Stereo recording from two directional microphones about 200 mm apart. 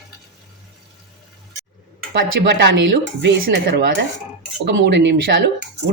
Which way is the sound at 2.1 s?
60° right (ahead or behind).